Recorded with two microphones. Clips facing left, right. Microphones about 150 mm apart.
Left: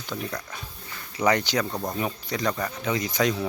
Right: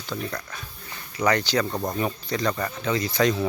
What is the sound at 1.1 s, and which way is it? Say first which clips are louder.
Speech: right 1 dB; 15° left (ahead or behind).